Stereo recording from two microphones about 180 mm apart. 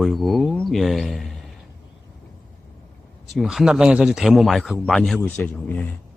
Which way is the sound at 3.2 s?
Centre (ahead or behind).